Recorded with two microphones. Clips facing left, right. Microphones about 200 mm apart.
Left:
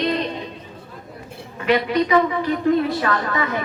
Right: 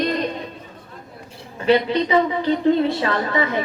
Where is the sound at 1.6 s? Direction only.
30° right (ahead or behind).